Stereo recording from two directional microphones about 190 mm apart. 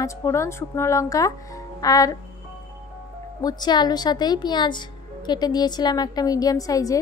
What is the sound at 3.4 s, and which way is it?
A woman's voice, 20° left (ahead or behind).